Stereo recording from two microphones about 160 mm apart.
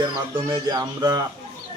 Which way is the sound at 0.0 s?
25° right (ahead or behind).